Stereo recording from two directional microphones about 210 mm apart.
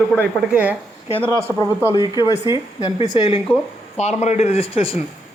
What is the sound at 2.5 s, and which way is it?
Speech, 20° left (ahead or behind).